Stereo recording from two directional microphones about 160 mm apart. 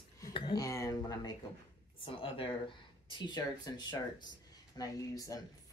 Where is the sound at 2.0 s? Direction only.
35° left (ahead or behind).